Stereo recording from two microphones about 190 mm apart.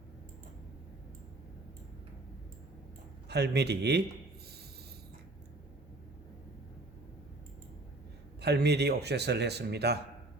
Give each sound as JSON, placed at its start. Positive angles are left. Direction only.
{"t": 3.2, "sound": "speech", "side_deg": -60}
{"t": 8.4, "sound": "speech", "side_deg": -60}